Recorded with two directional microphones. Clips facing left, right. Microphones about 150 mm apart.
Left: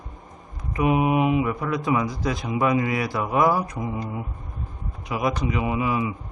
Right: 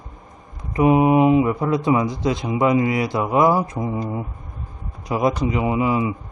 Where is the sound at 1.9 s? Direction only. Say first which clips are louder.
Right 3 dB; 25° right (ahead or behind).